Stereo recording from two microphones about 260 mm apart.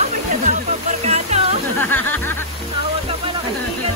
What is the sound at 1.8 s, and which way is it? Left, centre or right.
Snicker, centre.